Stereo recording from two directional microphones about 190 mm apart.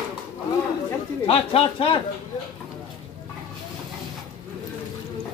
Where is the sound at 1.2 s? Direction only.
30° left (ahead or behind).